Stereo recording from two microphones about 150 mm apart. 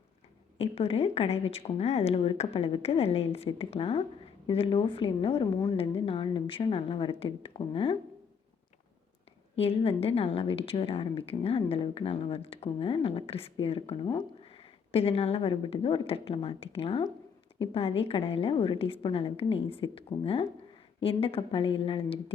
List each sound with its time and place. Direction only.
0.6 s a woman's voice: 40° left (ahead or behind)
9.6 s a woman's voice: 40° left (ahead or behind)